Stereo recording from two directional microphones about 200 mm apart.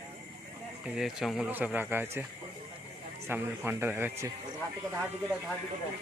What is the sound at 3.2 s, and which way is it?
Speech, 10° right (ahead or behind).